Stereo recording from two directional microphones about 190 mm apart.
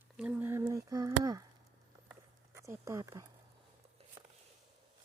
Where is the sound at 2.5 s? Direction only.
15° right (ahead or behind).